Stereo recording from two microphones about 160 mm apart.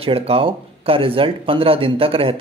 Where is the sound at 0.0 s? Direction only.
35° right (ahead or behind).